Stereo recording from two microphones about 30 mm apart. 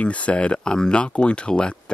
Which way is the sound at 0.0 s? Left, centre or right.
Left.